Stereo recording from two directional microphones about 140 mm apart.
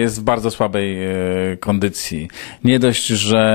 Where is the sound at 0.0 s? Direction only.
15° left (ahead or behind).